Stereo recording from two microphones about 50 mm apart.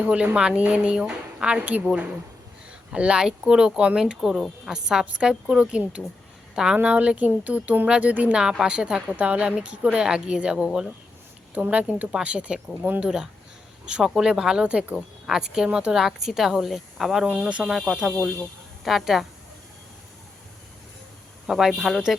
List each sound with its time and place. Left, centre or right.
0.0 s a woman's voice: right
2.9 s speech: right
4.4 s speech: centre
4.7 s a woman's voice: centre
6.8 s a woman's voice: right
8.3 s a woman's voice: centre
11.5 s a woman's voice: right
12.8 s speech: right
14.0 s speech: centre
14.9 s speech: centre
17.2 s speech: centre
21.4 s speech: centre